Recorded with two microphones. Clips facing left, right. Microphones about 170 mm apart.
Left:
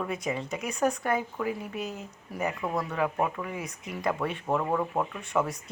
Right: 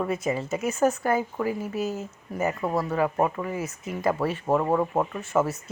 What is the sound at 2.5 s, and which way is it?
Speech, 35° right (ahead or behind).